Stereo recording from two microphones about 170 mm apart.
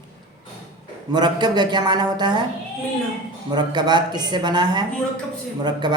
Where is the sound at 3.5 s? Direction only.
25° right (ahead or behind).